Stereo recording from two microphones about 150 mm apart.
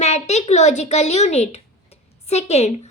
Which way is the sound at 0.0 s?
50° left (ahead or behind).